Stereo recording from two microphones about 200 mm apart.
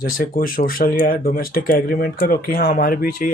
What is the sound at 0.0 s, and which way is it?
Speech, 45° left (ahead or behind).